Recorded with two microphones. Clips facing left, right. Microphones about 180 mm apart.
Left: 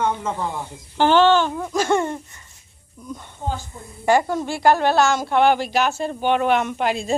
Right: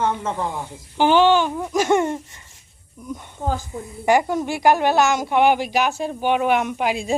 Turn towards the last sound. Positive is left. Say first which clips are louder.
# even
turn(degrees=-10)  # may be behind; listen again after turning